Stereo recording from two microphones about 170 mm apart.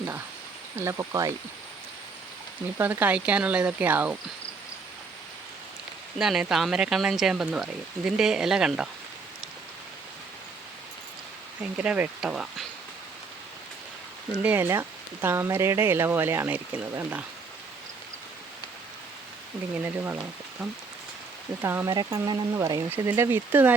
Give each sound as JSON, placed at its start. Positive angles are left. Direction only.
{"t": 0.8, "sound": "speech", "side_deg": -20}
{"t": 2.7, "sound": "speech", "side_deg": -10}
{"t": 6.1, "sound": "speech", "side_deg": 0}
{"t": 11.6, "sound": "speech", "side_deg": -5}
{"t": 14.4, "sound": "speech", "side_deg": -10}
{"t": 19.8, "sound": "speech", "side_deg": -10}
{"t": 21.6, "sound": "speech", "side_deg": -15}